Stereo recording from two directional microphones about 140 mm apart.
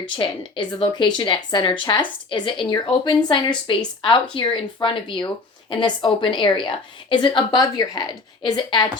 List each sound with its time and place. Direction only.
0.0 s a woman's voice: 40° left (ahead or behind)